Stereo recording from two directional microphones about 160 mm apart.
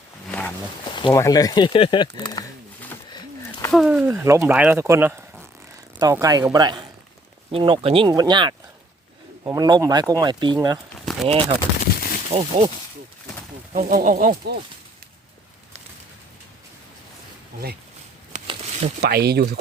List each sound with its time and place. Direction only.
0.3 s wild animals: 10° left (ahead or behind)
0.9 s speech: 30° left (ahead or behind)
3.1 s a sound: 25° left (ahead or behind)
3.7 s speech: 5° right (ahead or behind)
4.1 s speech: 15° right (ahead or behind)
11.0 s a sound: centre (ahead or behind)
11.3 s speech: 35° right (ahead or behind)
13.8 s speech: 55° right (ahead or behind)
18.4 s a sound: 40° right (ahead or behind)
19.0 s speech: 85° right